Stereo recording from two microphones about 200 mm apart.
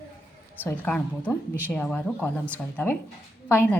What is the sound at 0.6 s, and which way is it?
A woman's voice, 10° left (ahead or behind).